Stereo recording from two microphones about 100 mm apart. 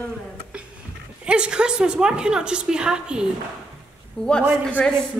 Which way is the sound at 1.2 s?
10° right (ahead or behind).